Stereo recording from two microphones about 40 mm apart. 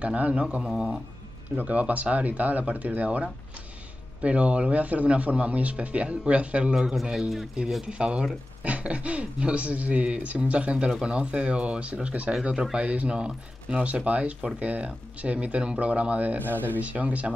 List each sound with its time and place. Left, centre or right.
0.0 s speech: right
0.6 s a man's voice: centre
1.6 s speech: right
6.7 s a man's voice: centre
7.8 s speech: right
16.3 s speech: right
16.8 s speech: right